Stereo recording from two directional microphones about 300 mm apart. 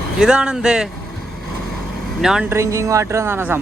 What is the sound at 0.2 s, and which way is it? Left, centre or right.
Speech, centre.